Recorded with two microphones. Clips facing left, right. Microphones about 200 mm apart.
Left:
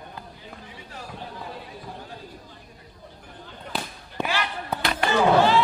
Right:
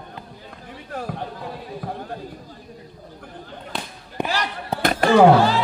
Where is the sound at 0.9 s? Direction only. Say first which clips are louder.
Right 11 dB; 55° right (ahead or behind).